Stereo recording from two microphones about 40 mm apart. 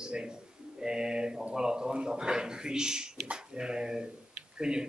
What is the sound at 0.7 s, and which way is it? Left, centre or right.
A man's voice, centre.